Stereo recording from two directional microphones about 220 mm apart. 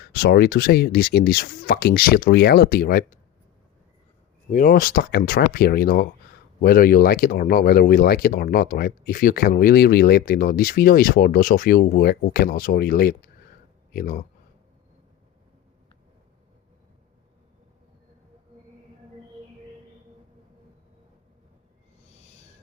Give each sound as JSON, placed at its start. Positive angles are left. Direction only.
{"t": 0.0, "sound": "speech", "side_deg": 45}
{"t": 4.5, "sound": "speech", "side_deg": 40}
{"t": 22.0, "sound": "owl", "side_deg": 30}